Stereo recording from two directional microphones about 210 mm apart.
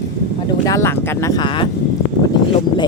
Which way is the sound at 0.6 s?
15° left (ahead or behind).